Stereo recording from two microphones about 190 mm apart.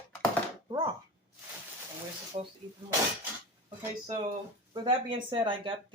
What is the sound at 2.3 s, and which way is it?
Speech, 35° right (ahead or behind).